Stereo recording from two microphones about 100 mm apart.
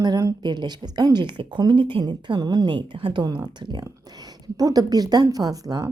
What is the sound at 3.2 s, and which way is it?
Speech, 45° right (ahead or behind).